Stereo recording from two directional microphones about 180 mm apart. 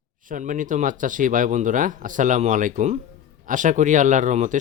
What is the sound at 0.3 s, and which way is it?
Speech, 45° right (ahead or behind).